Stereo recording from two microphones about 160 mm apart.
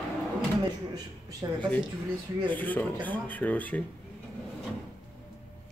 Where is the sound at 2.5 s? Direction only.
10° left (ahead or behind).